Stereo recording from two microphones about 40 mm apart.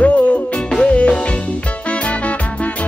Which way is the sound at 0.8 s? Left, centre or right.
Left.